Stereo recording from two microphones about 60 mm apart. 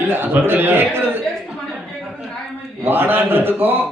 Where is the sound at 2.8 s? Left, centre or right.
Right.